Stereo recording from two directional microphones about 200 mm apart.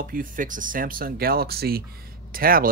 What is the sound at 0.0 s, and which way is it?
Speech, 45° right (ahead or behind).